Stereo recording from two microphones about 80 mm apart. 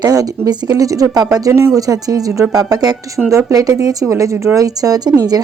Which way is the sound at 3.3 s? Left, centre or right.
Right.